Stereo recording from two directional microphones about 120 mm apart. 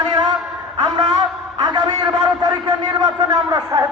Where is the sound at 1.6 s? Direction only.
35° right (ahead or behind).